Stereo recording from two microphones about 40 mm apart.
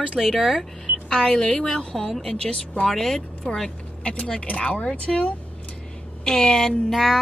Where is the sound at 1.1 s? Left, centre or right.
Centre.